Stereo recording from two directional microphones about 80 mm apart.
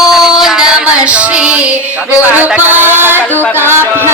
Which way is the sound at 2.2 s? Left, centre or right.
Right.